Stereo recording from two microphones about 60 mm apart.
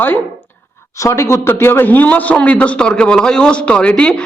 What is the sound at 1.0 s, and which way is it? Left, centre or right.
A man's voice, left.